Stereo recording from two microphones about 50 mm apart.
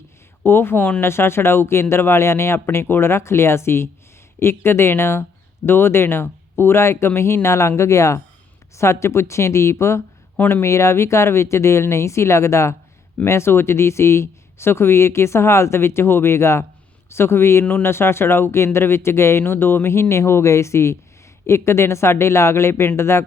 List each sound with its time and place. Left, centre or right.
0.4 s speech: left
0.8 s speech: left
1.0 s speech: left
2.6 s speech: left
7.4 s speech: left
8.7 s speech: left
13.2 s speech: left